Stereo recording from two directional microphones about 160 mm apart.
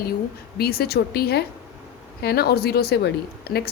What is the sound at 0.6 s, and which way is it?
A woman's voice, 75° left (ahead or behind).